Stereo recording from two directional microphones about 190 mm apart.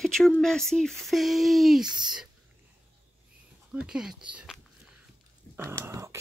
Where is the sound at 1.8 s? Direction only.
20° right (ahead or behind).